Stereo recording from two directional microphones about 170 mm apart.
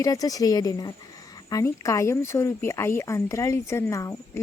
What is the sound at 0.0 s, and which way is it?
Speech, 20° left (ahead or behind).